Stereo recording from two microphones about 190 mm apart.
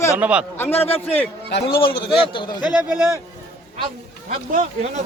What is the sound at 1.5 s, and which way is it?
Speech, 65° left (ahead or behind).